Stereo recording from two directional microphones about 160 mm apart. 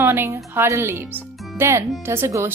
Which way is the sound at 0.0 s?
15° right (ahead or behind).